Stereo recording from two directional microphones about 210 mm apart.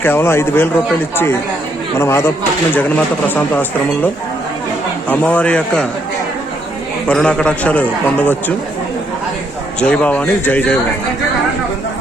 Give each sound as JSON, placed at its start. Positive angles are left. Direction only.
{"t": 0.0, "sound": "a man's voice", "side_deg": 10}
{"t": 7.1, "sound": "a man's voice", "side_deg": 5}
{"t": 9.8, "sound": "a man's voice", "side_deg": 5}